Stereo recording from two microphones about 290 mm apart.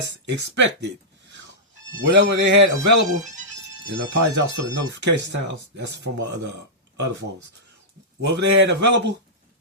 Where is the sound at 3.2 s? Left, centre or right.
Right.